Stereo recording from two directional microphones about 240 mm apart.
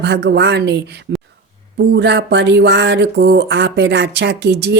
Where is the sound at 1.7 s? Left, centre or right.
Right.